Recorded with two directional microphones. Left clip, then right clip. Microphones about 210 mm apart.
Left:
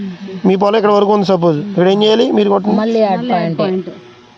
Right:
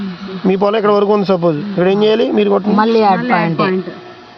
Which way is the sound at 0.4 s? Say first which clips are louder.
Left 1 dB; 50° left (ahead or behind).